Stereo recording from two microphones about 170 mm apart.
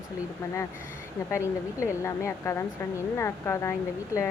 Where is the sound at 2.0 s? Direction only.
15° left (ahead or behind).